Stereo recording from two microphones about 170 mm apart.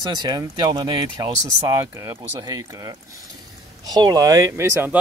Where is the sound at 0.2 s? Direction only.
25° right (ahead or behind).